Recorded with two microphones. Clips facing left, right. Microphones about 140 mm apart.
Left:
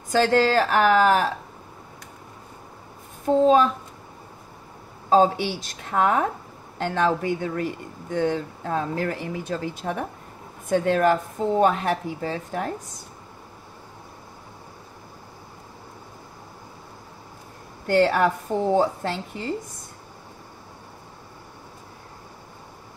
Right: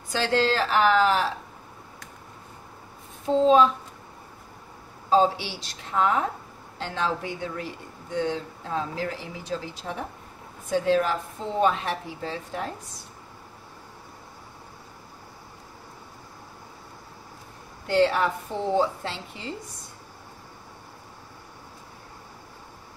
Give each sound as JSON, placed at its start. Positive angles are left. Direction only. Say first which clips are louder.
{"t": 0.1, "sound": "speech", "louder": "left 5 dB", "side_deg": 45}
{"t": 3.3, "sound": "speech", "louder": "left 1 dB", "side_deg": 50}
{"t": 5.1, "sound": "speech", "louder": "left 3 dB", "side_deg": 50}
{"t": 17.8, "sound": "speech", "louder": "left 3 dB", "side_deg": 50}